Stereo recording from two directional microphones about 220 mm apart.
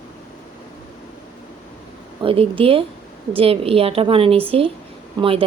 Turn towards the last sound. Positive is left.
turn(degrees=-25)  # may be behind; listen again after turning